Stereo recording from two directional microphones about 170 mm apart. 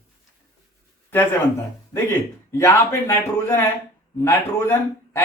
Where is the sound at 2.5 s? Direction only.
15° left (ahead or behind).